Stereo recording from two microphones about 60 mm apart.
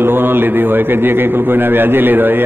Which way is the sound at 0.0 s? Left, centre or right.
Right.